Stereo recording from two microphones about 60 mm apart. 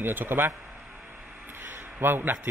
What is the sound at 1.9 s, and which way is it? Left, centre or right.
Speech, right.